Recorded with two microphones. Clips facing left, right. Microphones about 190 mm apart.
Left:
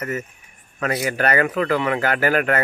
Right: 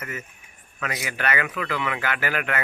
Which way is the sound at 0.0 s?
40° left (ahead or behind).